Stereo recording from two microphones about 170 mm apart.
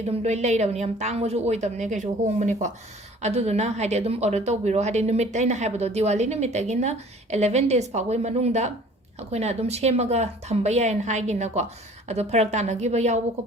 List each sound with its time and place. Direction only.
0.2 s a woman's voice: 40° right (ahead or behind)